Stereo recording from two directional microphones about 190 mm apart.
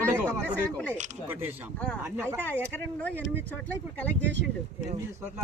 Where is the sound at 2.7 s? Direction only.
10° left (ahead or behind).